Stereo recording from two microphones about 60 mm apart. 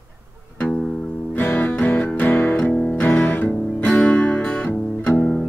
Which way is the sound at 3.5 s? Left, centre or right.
Centre.